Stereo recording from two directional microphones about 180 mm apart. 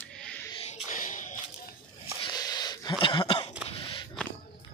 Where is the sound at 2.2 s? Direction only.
20° left (ahead or behind).